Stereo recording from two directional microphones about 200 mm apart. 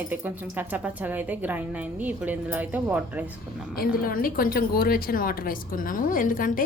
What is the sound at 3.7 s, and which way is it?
A woman's voice, 45° left (ahead or behind).